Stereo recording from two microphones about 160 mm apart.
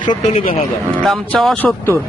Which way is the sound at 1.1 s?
Centre (ahead or behind).